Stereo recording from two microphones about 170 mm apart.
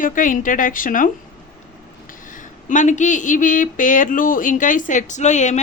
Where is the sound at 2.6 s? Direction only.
45° left (ahead or behind).